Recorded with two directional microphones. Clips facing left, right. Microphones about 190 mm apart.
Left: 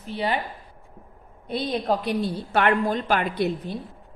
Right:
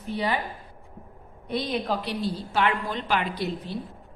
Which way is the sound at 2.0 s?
50° left (ahead or behind).